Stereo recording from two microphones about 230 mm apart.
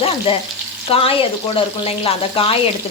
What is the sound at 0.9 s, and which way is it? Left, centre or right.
Frying, left.